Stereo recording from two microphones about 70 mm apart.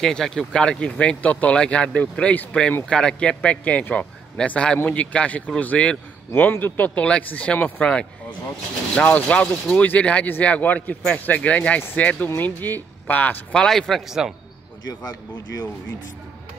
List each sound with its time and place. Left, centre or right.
0.0 s a man's voice: centre; by 13.4 s left
13.5 s speech: centre
14.0 s a man's voice: centre